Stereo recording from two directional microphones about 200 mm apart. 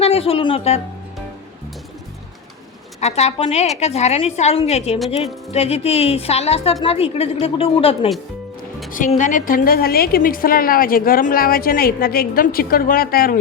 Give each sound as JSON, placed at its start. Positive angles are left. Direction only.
{"t": 0.0, "sound": "speech", "side_deg": 30}
{"t": 3.0, "sound": "a woman's voice", "side_deg": 35}
{"t": 9.1, "sound": "a woman's voice", "side_deg": 40}